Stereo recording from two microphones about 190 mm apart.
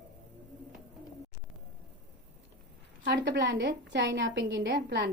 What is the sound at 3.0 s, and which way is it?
Speech, 65° right (ahead or behind).